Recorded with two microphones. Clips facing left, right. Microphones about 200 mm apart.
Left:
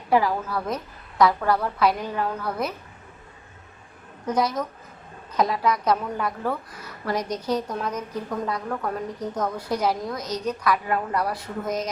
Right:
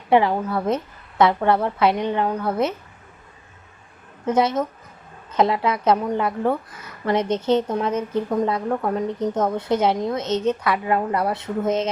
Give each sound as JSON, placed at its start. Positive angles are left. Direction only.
{"t": 0.1, "sound": "a woman's voice", "side_deg": -25}
{"t": 4.3, "sound": "a woman's voice", "side_deg": -25}